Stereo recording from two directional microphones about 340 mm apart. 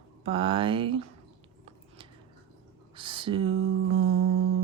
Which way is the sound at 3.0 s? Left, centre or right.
Centre.